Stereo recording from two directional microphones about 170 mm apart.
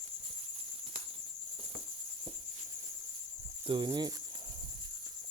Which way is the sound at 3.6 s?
25° right (ahead or behind).